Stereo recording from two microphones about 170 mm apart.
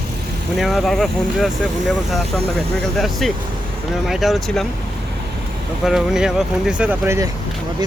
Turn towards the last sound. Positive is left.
turn(degrees=-15)  # may be behind; listen again after turning